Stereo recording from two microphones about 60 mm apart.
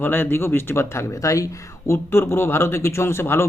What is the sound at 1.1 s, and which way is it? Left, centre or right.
Speech, left.